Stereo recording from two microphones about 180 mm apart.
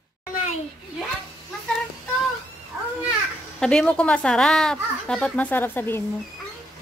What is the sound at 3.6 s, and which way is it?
A child's voice, 5° left (ahead or behind).